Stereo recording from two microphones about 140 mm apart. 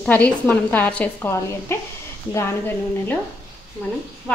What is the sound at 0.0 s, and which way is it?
Speech, 10° left (ahead or behind).